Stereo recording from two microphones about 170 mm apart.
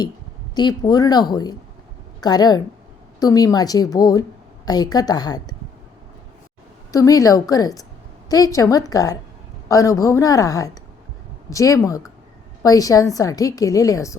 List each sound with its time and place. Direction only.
0.5 s a woman's voice: 25° left (ahead or behind)
6.9 s a woman's voice: 20° left (ahead or behind)